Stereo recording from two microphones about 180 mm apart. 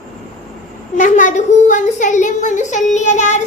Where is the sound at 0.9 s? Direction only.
45° left (ahead or behind).